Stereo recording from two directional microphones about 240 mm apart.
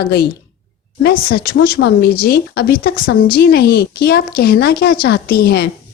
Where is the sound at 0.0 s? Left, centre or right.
Left.